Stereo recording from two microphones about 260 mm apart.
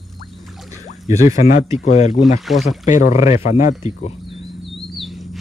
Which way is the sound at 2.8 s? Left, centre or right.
Left.